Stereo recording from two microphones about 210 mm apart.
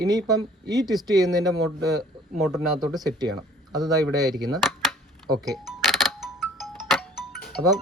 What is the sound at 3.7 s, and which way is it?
Speech, 20° right (ahead or behind).